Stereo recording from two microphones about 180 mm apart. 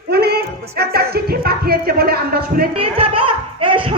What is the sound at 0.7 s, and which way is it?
Music, 60° right (ahead or behind).